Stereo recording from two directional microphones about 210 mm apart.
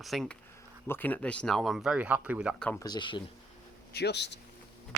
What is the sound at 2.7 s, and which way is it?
Speech, 15° left (ahead or behind).